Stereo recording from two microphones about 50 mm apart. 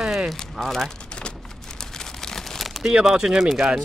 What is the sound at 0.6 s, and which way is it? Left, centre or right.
Speech, centre.